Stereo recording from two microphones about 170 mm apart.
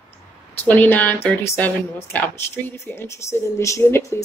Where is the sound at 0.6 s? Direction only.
10° left (ahead or behind).